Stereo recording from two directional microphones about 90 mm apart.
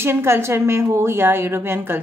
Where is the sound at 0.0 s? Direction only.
25° right (ahead or behind).